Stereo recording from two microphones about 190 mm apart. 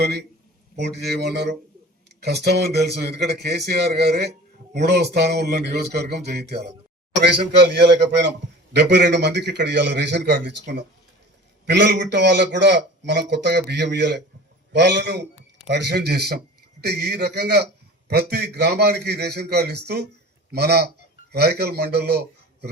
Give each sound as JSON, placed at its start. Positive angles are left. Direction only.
{"t": 0.0, "sound": "a man's voice", "side_deg": -60}